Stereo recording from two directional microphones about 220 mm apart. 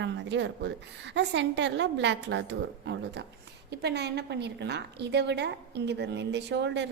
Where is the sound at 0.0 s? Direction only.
55° right (ahead or behind).